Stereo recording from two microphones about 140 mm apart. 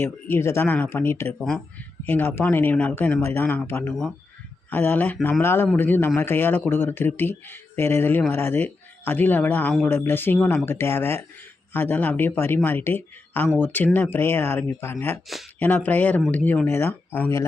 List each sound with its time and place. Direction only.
0.0 s speech: 15° left (ahead or behind)
1.3 s speech: 5° left (ahead or behind)